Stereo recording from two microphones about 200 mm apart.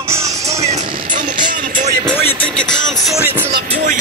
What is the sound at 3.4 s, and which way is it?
Music, 55° right (ahead or behind).